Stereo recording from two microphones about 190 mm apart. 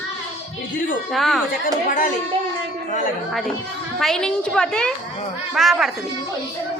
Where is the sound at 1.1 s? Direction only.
Centre (ahead or behind).